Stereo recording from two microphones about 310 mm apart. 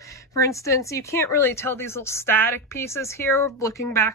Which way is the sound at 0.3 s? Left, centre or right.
Centre.